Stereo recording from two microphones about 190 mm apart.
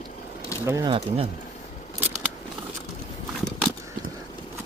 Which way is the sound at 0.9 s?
30° right (ahead or behind).